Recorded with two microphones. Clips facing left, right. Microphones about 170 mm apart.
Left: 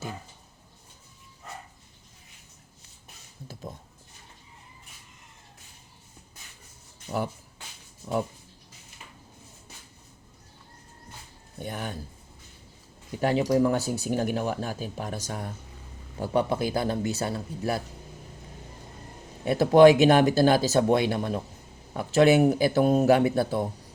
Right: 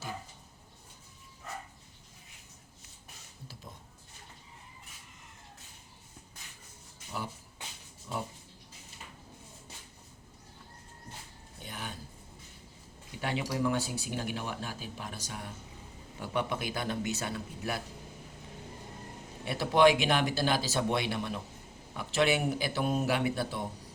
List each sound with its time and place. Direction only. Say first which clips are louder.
11.6 s a sound: left 8 dB; 50° left (ahead or behind)
13.1 s speech: left 10 dB; 40° left (ahead or behind)
19.5 s speech: left 8 dB; 45° left (ahead or behind)